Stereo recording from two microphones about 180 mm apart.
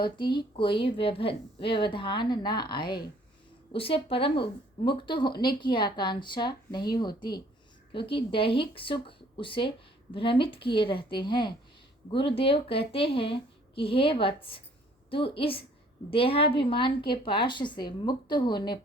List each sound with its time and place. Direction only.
0.0 s a woman's voice: 25° left (ahead or behind)